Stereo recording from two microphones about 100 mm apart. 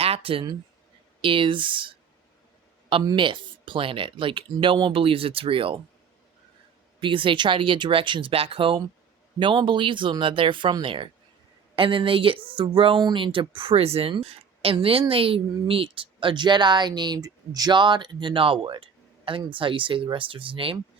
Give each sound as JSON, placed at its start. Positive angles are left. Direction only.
{"t": 0.0, "sound": "a sound", "side_deg": -75}
{"t": 1.2, "sound": "speech", "side_deg": -60}
{"t": 3.2, "sound": "speech", "side_deg": -55}
{"t": 7.0, "sound": "speech", "side_deg": -60}